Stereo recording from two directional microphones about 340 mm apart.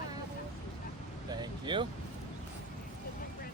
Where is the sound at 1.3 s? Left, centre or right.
Centre.